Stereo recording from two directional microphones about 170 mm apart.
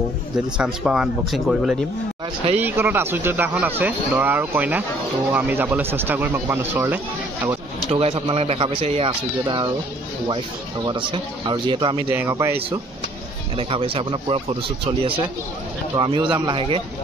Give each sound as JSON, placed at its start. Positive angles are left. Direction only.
{"t": 0.6, "sound": "speech", "side_deg": -5}
{"t": 7.9, "sound": "speech", "side_deg": -35}
{"t": 10.9, "sound": "speech", "side_deg": -30}
{"t": 12.1, "sound": "speech", "side_deg": -15}
{"t": 13.6, "sound": "speech", "side_deg": -35}